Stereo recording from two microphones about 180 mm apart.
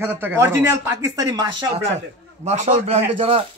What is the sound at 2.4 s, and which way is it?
A man's voice, 40° right (ahead or behind).